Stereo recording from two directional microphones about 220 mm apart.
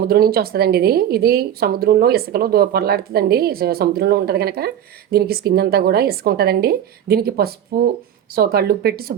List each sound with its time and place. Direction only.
0.1 s a woman's voice: 45° right (ahead or behind)